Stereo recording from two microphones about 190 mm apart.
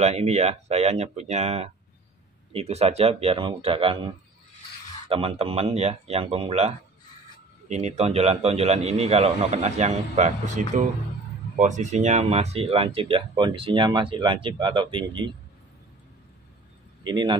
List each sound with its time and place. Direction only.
0.0 s a man's voice: 35° right (ahead or behind)
17.0 s speech: 25° right (ahead or behind)